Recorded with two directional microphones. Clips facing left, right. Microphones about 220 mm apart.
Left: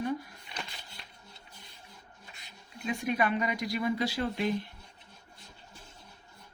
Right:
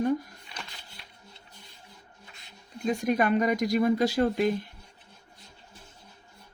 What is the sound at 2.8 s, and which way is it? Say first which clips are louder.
Speech: right 5 dB; 40° right (ahead or behind).